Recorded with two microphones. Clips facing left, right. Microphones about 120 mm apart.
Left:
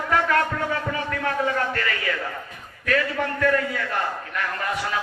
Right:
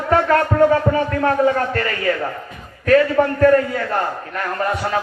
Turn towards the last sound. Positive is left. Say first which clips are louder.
# right 6 dB
turn(degrees=-40)  # may be behind; listen again after turning